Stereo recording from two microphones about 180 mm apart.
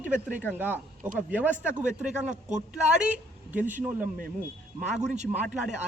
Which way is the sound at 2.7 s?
10° right (ahead or behind).